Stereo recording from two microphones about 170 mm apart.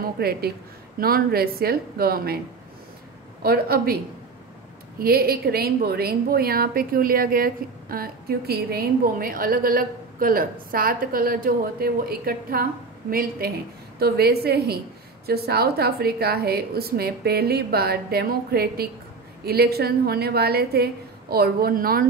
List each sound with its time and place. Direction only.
0.2 s a woman's voice: 65° right (ahead or behind)
3.4 s a woman's voice: 65° right (ahead or behind)